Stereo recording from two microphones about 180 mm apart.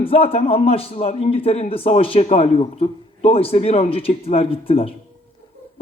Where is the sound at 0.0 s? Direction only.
30° left (ahead or behind).